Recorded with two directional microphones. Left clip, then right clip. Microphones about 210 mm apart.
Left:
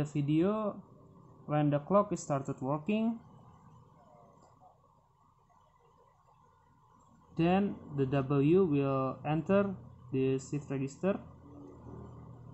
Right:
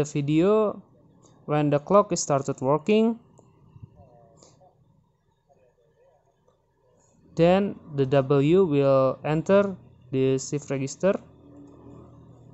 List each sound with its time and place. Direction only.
0.0 s speech: 50° right (ahead or behind)
7.3 s speech: 50° right (ahead or behind)